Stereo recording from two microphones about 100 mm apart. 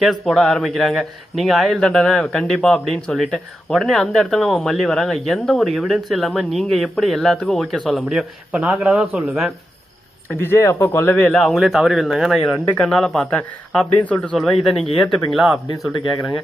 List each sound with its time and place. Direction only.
0.0 s a man's voice: centre (ahead or behind)
10.2 s a man's voice: 25° left (ahead or behind)
14.3 s a man's voice: centre (ahead or behind)